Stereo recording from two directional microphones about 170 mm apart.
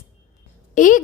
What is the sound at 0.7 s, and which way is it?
Speech, 50° left (ahead or behind).